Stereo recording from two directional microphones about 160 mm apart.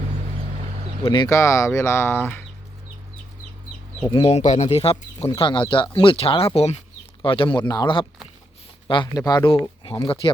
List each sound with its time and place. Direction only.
1.0 s speech: 25° left (ahead or behind)
4.1 s speech: 35° left (ahead or behind)
5.3 s speech: 30° left (ahead or behind)